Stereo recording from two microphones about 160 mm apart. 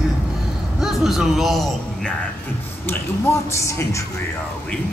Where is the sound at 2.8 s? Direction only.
15° left (ahead or behind).